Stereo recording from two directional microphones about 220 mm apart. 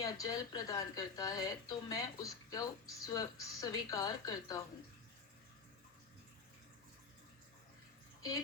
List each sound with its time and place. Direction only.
0.0 s speech: 15° left (ahead or behind)